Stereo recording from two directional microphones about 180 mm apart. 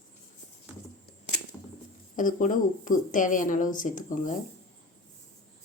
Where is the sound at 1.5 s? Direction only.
10° left (ahead or behind).